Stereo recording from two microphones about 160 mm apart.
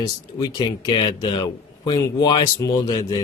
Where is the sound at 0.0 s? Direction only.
25° left (ahead or behind).